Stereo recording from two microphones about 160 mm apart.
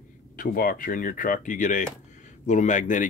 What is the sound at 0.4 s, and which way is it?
Speech, 60° left (ahead or behind).